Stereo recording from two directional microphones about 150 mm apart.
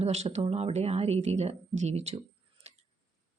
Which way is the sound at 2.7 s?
45° right (ahead or behind).